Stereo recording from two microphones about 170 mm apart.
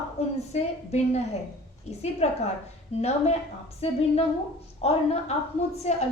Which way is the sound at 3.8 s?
35° left (ahead or behind).